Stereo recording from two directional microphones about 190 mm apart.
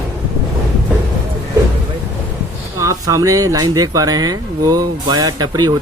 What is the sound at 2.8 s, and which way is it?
Speech, 15° right (ahead or behind).